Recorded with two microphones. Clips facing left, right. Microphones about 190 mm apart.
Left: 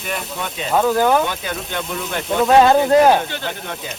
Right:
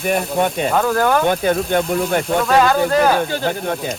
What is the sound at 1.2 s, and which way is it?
Speech, 50° right (ahead or behind).